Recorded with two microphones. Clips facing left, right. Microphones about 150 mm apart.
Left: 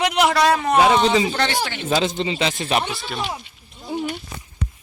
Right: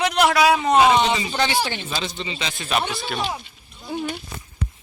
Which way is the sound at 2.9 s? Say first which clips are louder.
Right 1 dB; centre (ahead or behind).